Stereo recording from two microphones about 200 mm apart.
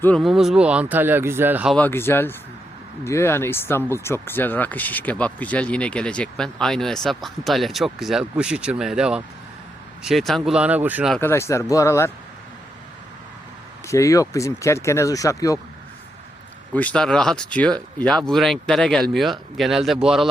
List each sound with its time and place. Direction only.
0.0 s speech: 5° left (ahead or behind)
1.7 s speech: 10° left (ahead or behind)
11.2 s speech: 10° left (ahead or behind)
13.8 s speech: 15° left (ahead or behind)
16.7 s speech: 5° left (ahead or behind)